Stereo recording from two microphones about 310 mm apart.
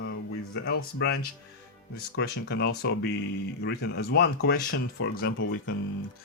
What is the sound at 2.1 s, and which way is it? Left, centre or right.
Speech, left.